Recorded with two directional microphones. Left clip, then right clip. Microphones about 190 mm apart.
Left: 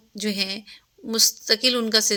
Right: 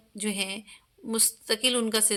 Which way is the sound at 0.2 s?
15° left (ahead or behind).